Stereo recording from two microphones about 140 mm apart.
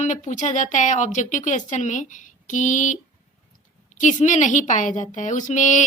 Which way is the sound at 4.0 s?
60° left (ahead or behind).